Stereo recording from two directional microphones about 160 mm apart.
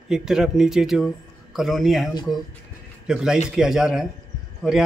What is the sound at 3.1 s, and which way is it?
A man's voice, 5° right (ahead or behind).